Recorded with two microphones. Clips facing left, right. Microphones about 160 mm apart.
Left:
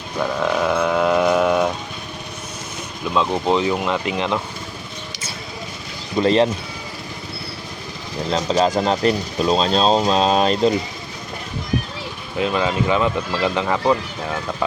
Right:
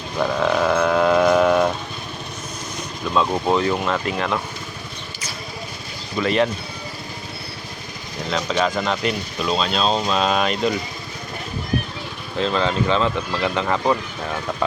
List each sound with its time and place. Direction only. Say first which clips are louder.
0.2 s sheep: right 1 dB; 5° left (ahead or behind)
3.5 s speech: left 1 dB; 15° left (ahead or behind)
6.1 s speech: left 4 dB; 30° left (ahead or behind)
8.3 s speech: left 3 dB; 35° left (ahead or behind)
12.4 s speech: left 1 dB; 10° left (ahead or behind)